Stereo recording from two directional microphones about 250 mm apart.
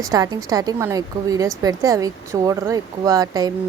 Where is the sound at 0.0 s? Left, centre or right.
Centre.